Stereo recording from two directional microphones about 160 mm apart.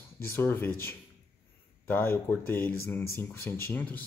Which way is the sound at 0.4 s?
15° left (ahead or behind).